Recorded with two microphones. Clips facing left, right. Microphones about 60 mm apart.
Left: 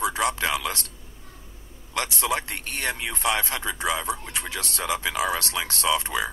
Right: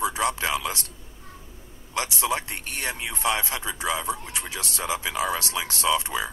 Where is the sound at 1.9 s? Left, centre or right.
Left.